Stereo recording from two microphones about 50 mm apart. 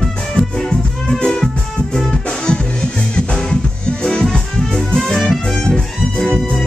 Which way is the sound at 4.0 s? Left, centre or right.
Centre.